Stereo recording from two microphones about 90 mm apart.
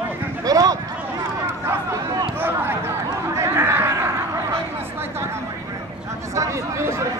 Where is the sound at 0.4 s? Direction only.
40° right (ahead or behind).